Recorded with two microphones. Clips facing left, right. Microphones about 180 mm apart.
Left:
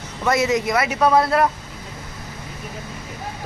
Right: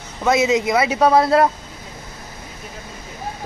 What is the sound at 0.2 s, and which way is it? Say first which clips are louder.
Speech: right 2 dB; 20° right (ahead or behind).